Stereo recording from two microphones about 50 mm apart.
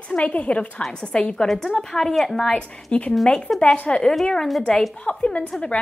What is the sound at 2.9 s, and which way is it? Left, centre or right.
A woman's voice, centre.